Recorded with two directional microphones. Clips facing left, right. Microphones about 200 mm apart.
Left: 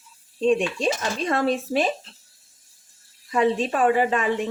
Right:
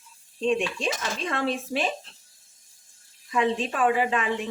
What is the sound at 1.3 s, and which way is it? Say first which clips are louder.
Speech: left 6 dB; 40° left (ahead or behind).